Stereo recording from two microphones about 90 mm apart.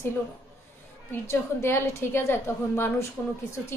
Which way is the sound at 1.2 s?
30° left (ahead or behind).